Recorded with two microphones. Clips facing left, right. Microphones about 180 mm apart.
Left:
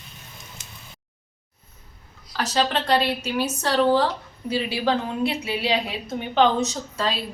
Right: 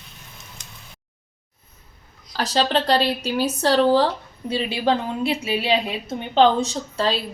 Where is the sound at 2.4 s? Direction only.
30° right (ahead or behind).